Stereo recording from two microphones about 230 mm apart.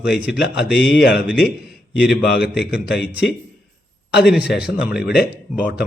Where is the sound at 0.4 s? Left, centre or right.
Left.